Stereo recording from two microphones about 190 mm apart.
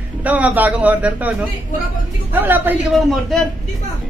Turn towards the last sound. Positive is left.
turn(degrees=0)  # may be behind; listen again after turning